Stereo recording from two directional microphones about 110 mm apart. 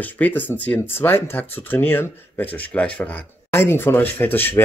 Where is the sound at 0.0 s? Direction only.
15° left (ahead or behind).